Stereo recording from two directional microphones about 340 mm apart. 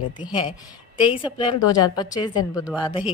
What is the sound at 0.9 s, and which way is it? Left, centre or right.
A woman's voice, centre.